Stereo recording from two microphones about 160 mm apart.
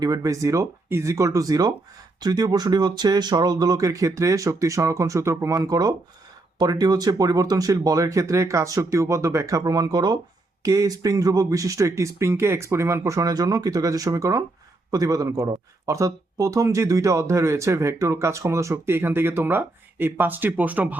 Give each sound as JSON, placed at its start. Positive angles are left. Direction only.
{"t": 0.0, "sound": "speech", "side_deg": -20}